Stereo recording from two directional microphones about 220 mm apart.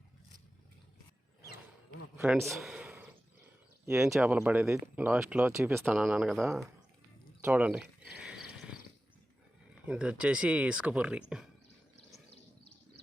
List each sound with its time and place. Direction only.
2.1 s a sound: 5° right (ahead or behind)
3.8 s speech: 5° right (ahead or behind)
9.8 s speech: 5° right (ahead or behind)
12.1 s bird: 30° left (ahead or behind)